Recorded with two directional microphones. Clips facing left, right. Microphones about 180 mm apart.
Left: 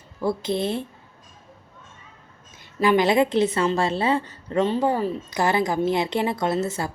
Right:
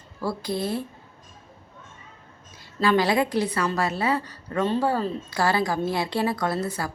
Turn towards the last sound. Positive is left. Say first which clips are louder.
# left 3 dB
turn(degrees=25)  # may be behind; listen again after turning